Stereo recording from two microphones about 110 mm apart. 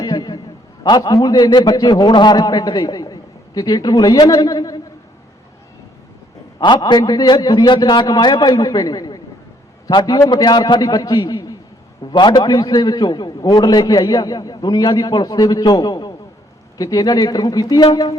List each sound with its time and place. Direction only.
0.0 s a sound: 35° left (ahead or behind)
0.9 s a man's voice: 35° left (ahead or behind)
6.7 s a man's voice: 40° left (ahead or behind)